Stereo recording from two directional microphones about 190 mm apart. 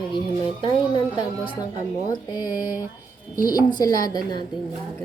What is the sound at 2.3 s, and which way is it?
A woman's voice, 20° left (ahead or behind).